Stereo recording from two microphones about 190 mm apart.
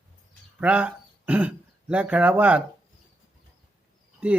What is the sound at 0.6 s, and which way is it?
Speech, 5° right (ahead or behind).